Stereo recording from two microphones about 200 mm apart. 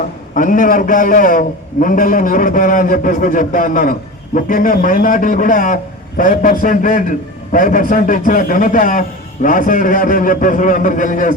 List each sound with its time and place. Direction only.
0.3 s a man's voice: 40° left (ahead or behind)